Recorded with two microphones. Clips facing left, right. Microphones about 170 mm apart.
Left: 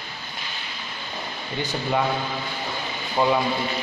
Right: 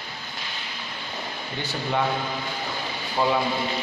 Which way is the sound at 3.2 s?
15° left (ahead or behind).